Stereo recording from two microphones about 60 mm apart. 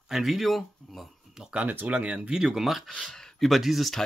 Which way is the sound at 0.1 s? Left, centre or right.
Centre.